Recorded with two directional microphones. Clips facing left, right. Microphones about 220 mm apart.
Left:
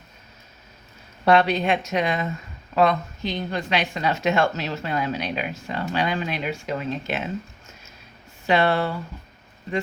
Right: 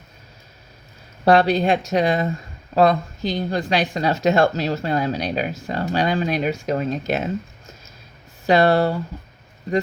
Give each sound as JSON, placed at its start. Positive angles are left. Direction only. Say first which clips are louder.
{"t": 1.2, "sound": "speech", "louder": "right 3 dB", "side_deg": -35}
{"t": 8.4, "sound": "speech", "louder": "right 5 dB", "side_deg": -40}